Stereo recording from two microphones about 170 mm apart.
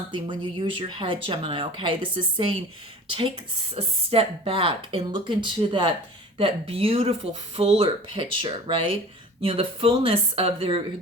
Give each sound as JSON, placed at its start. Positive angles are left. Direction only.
{"t": 0.1, "sound": "speech", "side_deg": -30}